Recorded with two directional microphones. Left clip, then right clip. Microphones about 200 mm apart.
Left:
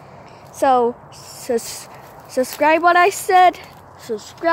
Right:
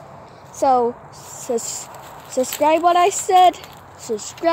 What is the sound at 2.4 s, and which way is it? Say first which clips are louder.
Speech: left 1 dB; 30° left (ahead or behind).